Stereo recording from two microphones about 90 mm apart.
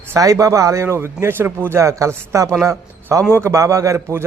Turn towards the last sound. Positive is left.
turn(degrees=-35)  # may be behind; listen again after turning